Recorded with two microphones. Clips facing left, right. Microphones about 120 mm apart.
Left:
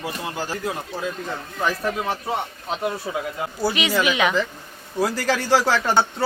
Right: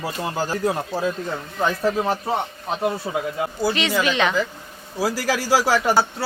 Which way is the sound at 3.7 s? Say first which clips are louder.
Left 1 dB; 10° left (ahead or behind).